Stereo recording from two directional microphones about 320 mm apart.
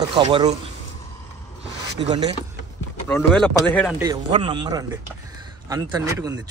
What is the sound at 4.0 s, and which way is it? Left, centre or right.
A man's voice, centre.